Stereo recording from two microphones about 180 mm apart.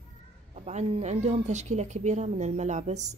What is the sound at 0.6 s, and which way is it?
A woman's voice, 40° right (ahead or behind).